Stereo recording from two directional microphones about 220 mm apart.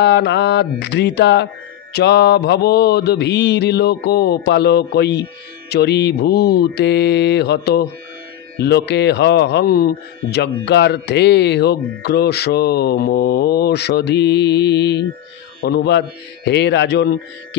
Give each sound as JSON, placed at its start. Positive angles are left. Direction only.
{"t": 0.0, "sound": "speech", "side_deg": 50}